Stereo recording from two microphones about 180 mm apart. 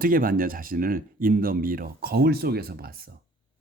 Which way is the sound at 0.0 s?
50° right (ahead or behind).